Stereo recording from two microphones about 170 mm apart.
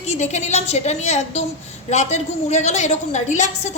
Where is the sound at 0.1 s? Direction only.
40° left (ahead or behind).